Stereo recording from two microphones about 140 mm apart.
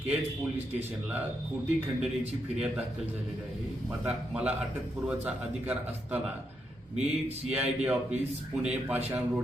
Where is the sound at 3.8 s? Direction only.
10° right (ahead or behind).